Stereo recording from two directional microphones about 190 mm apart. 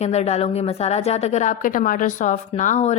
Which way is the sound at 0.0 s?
35° left (ahead or behind).